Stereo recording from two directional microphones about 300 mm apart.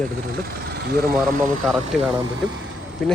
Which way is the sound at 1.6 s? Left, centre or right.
Centre.